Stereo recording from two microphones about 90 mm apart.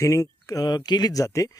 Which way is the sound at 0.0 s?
35° left (ahead or behind).